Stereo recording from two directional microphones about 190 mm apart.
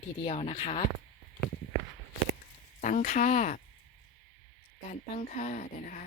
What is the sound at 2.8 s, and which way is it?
Speech, 45° left (ahead or behind).